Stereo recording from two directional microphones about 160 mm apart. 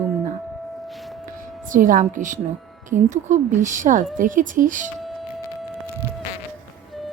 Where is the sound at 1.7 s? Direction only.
55° right (ahead or behind).